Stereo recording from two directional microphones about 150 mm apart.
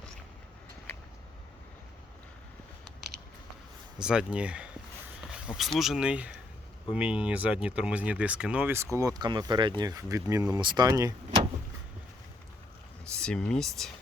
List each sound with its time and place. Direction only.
3.9 s speech: 5° right (ahead or behind); by 11.3 s 25° right (ahead or behind)
13.1 s speech: 5° left (ahead or behind)